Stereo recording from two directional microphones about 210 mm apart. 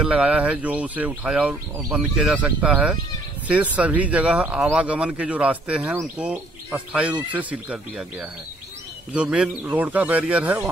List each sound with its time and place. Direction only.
0.0 s speech: 5° right (ahead or behind)